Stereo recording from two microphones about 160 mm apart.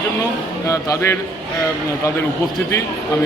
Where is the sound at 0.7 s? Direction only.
20° left (ahead or behind).